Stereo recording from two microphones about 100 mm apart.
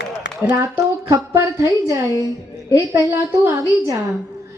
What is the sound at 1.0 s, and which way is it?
A woman's voice, 30° right (ahead or behind).